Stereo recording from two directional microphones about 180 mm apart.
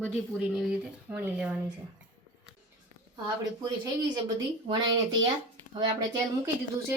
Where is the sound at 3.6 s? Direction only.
25° right (ahead or behind).